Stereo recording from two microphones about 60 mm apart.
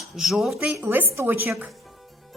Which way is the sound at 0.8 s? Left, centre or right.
Right.